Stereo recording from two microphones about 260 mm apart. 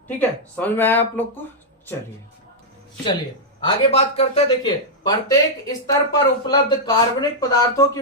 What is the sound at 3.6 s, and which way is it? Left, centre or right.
A man's voice, left.